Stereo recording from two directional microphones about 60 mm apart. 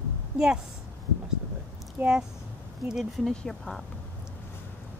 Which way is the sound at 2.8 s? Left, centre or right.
Centre.